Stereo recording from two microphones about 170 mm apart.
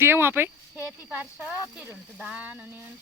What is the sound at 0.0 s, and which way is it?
Speech, 15° right (ahead or behind).